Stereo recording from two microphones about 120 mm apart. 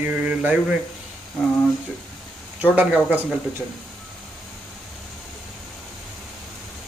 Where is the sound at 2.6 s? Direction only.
15° right (ahead or behind).